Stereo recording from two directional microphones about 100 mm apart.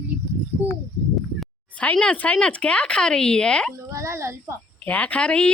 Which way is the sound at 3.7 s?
30° right (ahead or behind).